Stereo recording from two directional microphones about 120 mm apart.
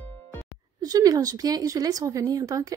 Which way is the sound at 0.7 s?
30° right (ahead or behind).